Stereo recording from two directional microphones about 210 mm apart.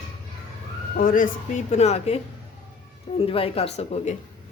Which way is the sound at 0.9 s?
40° left (ahead or behind).